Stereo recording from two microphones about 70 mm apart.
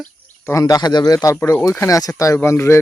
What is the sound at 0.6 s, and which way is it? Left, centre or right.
Speech, left.